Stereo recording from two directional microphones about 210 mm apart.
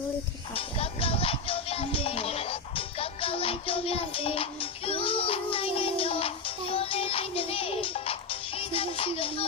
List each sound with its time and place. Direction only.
0.5 s music: 25° left (ahead or behind)